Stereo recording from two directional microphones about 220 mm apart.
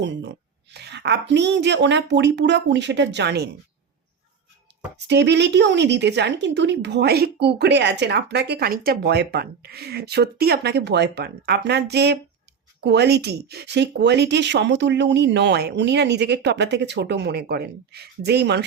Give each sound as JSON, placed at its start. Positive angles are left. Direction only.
{"t": 0.0, "sound": "a woman's voice", "side_deg": -50}
{"t": 4.7, "sound": "a sound", "side_deg": -50}
{"t": 5.0, "sound": "a woman's voice", "side_deg": -50}